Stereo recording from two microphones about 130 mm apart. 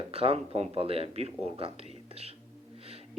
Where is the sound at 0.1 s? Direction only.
50° right (ahead or behind).